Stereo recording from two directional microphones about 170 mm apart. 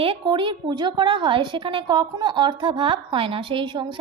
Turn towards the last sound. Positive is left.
turn(degrees=-30)  # may be behind; listen again after turning